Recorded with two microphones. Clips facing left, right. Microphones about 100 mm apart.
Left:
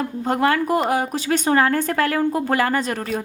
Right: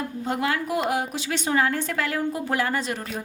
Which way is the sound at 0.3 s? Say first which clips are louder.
Left 7 dB; 50° left (ahead or behind).